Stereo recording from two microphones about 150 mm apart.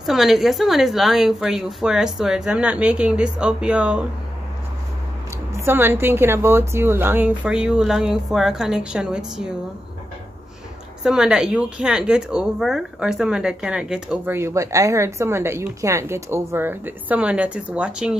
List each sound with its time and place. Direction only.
0.0 s a woman's voice: centre (ahead or behind)
5.6 s speech: 15° right (ahead or behind)
11.1 s speech: 5° right (ahead or behind)